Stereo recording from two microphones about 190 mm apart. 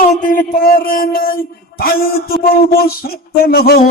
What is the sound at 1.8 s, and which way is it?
Speech, 55° left (ahead or behind).